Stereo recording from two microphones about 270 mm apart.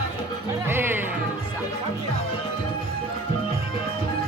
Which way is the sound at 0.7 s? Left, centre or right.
Centre.